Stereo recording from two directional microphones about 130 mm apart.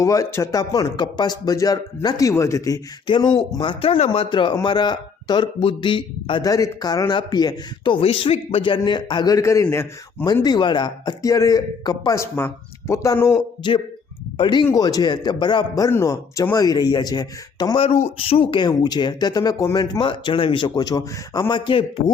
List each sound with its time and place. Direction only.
0.0 s speech: 25° left (ahead or behind)
3.1 s speech: 35° left (ahead or behind)
6.5 s speech: 30° left (ahead or behind)
10.4 s speech: 35° left (ahead or behind)
13.6 s speech: 40° left (ahead or behind)
14.7 s speech: 30° left (ahead or behind)
18.2 s speech: 45° left (ahead or behind)
20.7 s speech: 30° left (ahead or behind)